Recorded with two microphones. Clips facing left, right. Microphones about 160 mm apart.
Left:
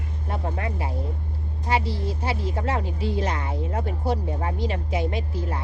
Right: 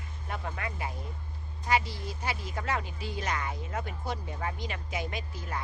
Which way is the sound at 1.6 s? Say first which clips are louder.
Left 4 dB; 30° left (ahead or behind).